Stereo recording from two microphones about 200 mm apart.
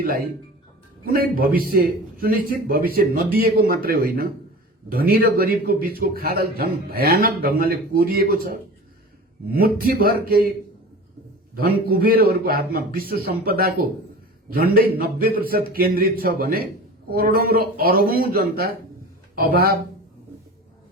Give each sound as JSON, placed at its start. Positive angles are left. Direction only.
{"t": 0.0, "sound": "a man's voice", "side_deg": -50}
{"t": 11.5, "sound": "a man's voice", "side_deg": -50}